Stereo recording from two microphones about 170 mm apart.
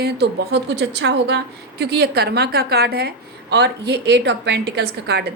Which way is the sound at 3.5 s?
80° right.